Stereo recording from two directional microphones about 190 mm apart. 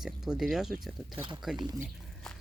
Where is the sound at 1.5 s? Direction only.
25° right (ahead or behind).